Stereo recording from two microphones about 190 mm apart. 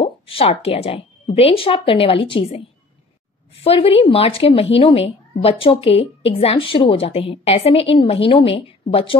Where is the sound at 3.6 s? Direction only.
30° left (ahead or behind).